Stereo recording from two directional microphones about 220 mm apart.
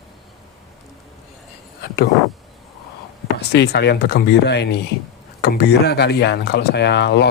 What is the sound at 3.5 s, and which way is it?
Speech, 50° left (ahead or behind).